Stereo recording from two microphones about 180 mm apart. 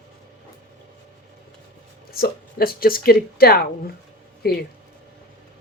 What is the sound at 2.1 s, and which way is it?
Speech, 55° left (ahead or behind).